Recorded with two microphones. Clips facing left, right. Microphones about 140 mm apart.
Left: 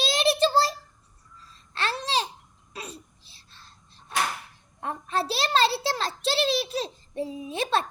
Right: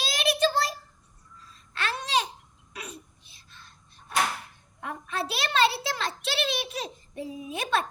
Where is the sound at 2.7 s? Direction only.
30° left (ahead or behind).